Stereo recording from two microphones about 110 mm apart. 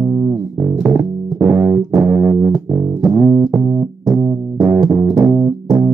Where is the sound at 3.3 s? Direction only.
Centre (ahead or behind).